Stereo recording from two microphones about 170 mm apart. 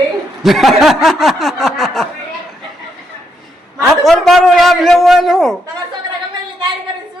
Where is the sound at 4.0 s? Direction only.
Centre (ahead or behind).